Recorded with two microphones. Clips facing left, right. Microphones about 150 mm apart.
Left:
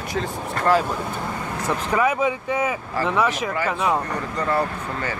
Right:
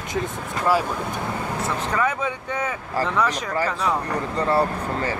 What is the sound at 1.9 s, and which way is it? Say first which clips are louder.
Speech: left 6 dB; 10° left (ahead or behind).